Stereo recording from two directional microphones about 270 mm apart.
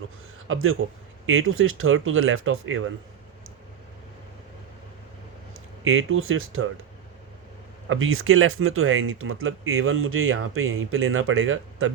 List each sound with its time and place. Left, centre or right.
0.4 s speech: right
5.8 s speech: right
7.9 s speech: right